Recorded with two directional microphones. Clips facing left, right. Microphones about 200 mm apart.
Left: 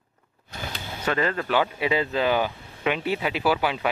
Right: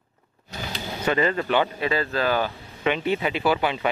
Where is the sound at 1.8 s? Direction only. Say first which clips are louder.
Left 1 dB; 15° left (ahead or behind).